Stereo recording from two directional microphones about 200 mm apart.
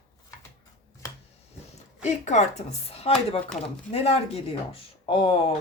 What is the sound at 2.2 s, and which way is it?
Speech, 35° left (ahead or behind).